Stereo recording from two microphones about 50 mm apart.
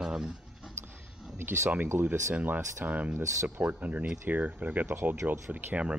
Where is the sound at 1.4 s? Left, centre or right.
Right.